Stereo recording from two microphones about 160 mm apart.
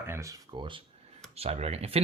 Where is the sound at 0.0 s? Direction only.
15° right (ahead or behind).